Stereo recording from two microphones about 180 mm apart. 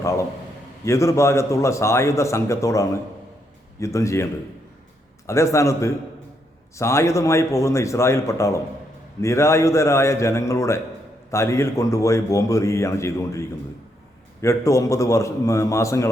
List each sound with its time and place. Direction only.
0.0 s a man's voice: 15° left (ahead or behind)